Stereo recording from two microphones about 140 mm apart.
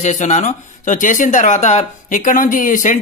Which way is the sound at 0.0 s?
55° left (ahead or behind).